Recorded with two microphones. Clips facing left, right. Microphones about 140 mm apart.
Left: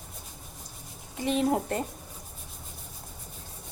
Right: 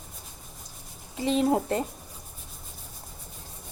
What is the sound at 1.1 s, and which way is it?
Speech, 25° right (ahead or behind).